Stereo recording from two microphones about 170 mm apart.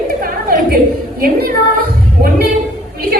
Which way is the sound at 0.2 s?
60° right (ahead or behind).